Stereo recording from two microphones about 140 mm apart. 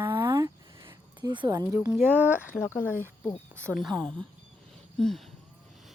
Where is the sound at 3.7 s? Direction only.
Centre (ahead or behind).